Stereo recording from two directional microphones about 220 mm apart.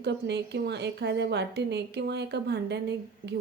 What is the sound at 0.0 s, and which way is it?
A woman's voice, 50° right (ahead or behind).